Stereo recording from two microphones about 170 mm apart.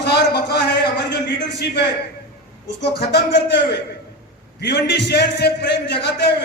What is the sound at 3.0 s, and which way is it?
Speech, 80° left.